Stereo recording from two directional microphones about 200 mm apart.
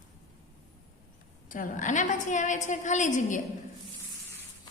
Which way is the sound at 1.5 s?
40° left (ahead or behind).